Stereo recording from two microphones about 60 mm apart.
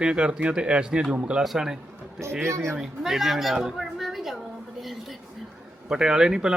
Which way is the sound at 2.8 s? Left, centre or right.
Centre.